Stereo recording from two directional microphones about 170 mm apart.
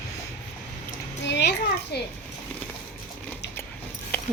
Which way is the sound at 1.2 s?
90° left.